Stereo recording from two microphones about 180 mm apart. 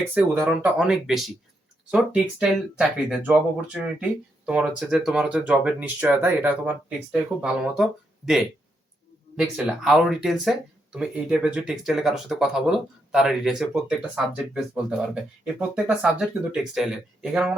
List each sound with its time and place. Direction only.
0.1 s speech: 10° right (ahead or behind)